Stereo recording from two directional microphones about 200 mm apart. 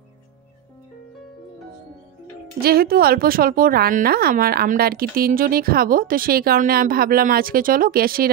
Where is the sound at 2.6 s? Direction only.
50° right (ahead or behind).